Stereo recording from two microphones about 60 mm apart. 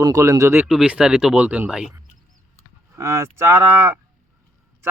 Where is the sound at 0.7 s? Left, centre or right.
Centre.